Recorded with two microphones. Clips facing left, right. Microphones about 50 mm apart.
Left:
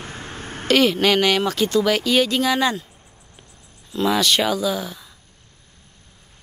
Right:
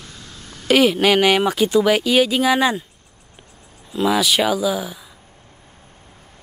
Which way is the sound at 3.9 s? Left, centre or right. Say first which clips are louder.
Right 1 dB; centre.